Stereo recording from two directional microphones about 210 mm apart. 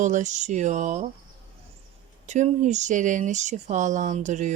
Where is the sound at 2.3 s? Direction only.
35° right (ahead or behind).